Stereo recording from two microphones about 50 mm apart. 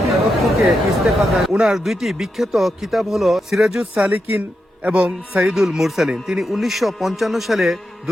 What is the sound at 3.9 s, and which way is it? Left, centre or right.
Speech, right.